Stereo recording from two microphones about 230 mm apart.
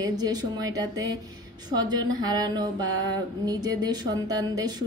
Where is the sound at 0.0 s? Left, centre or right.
Centre.